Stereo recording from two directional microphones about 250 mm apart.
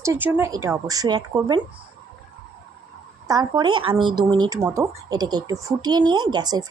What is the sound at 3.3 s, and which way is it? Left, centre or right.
Speech, centre.